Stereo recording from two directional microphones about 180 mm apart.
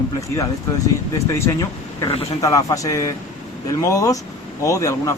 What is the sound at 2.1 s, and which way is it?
Speech, 30° left (ahead or behind).